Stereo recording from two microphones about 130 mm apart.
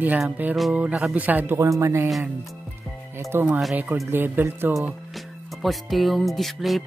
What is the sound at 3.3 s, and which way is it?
Speech, 10° right (ahead or behind).